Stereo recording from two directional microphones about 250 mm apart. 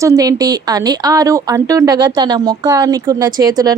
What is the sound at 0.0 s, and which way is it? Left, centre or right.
Speech, centre.